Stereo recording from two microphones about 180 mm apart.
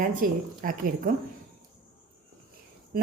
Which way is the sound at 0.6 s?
50° right (ahead or behind).